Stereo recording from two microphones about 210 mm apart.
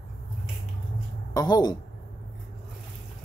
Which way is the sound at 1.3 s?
20° left (ahead or behind).